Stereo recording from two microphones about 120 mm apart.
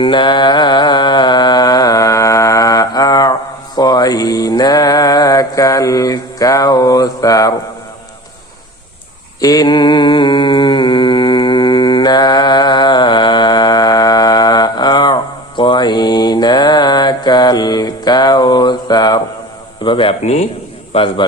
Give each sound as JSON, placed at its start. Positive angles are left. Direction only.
{"t": 0.0, "sound": "mantra", "side_deg": 40}
{"t": 9.4, "sound": "mantra", "side_deg": 30}
{"t": 19.8, "sound": "a man's voice", "side_deg": 45}